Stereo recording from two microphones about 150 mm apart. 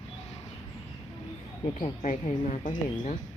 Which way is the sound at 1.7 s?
50° left (ahead or behind).